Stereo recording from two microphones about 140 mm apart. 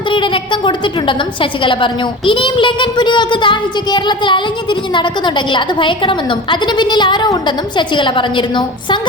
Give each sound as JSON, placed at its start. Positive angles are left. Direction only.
{"t": 0.1, "sound": "a woman's voice", "side_deg": 35}